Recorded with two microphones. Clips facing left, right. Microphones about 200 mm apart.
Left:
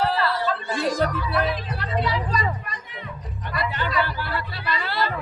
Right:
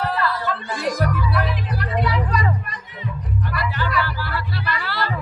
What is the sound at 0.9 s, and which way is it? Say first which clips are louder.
Music: even; 25° left (ahead or behind).